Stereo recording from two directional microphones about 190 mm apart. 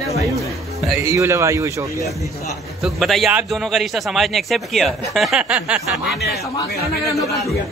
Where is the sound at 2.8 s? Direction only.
Centre (ahead or behind).